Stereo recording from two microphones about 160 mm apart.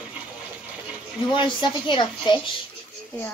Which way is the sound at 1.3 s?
30° left (ahead or behind).